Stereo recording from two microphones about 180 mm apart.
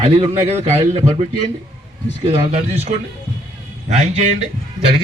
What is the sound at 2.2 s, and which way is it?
A man's voice, 35° right (ahead or behind).